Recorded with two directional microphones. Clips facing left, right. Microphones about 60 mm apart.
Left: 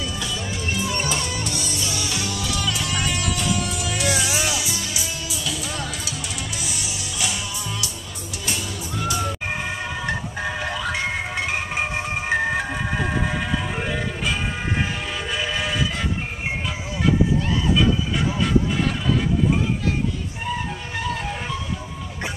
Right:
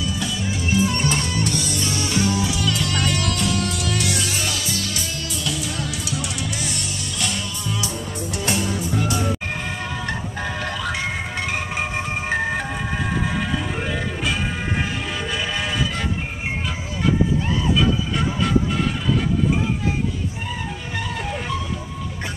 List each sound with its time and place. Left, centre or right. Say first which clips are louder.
0.2 s music: right 3 dB; centre
0.8 s music: right 3 dB; right
2.6 s music: right 2 dB; centre
8.5 s music: right 5 dB; right
10.0 s music: left 1 dB; centre
12.3 s ice cream truck: left 2 dB; centre
15.3 s music: left 1 dB; centre
21.1 s music: right 2 dB; centre